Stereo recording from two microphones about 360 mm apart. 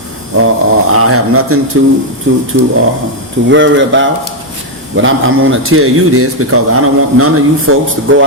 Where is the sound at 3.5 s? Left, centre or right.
Right.